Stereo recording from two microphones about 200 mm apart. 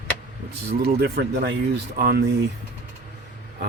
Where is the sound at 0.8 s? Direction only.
55° right (ahead or behind).